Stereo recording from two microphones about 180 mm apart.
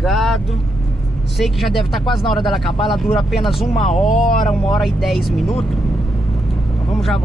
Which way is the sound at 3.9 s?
45° left (ahead or behind).